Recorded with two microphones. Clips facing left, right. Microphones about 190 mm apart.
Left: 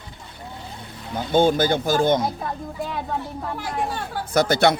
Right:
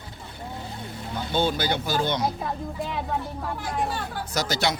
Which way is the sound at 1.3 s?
50° left (ahead or behind).